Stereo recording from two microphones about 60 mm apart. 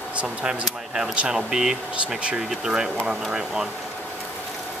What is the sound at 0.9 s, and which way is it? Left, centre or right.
Speech, centre.